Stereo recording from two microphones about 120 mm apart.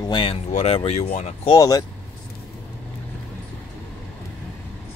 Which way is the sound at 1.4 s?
35° left (ahead or behind).